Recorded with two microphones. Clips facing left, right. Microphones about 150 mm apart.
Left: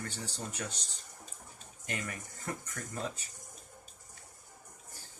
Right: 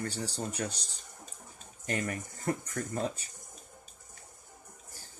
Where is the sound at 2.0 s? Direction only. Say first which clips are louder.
Right 7 dB; 35° right (ahead or behind).